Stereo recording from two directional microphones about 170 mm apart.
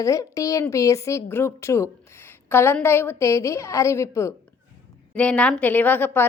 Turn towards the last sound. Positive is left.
turn(degrees=10)  # may be behind; listen again after turning